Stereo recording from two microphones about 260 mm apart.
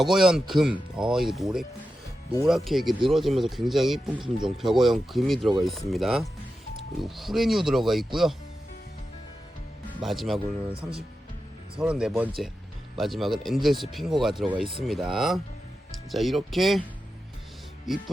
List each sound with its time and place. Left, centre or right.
0.0 s speech: centre
10.0 s speech: centre
10.7 s speech: right
11.8 s speech: centre
17.9 s speech: centre